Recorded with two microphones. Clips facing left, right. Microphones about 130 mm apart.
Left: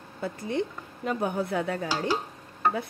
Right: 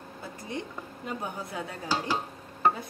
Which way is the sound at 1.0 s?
70° left (ahead or behind).